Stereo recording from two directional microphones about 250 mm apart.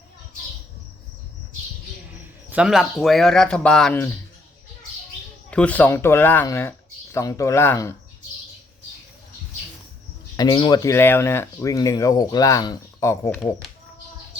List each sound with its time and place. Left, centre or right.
2.5 s speech: centre
5.5 s speech: centre
10.3 s speech: centre